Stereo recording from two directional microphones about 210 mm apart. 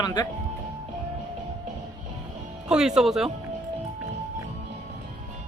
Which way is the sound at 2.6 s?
5° right (ahead or behind).